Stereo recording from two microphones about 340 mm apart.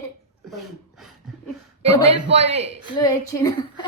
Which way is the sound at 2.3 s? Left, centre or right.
Centre.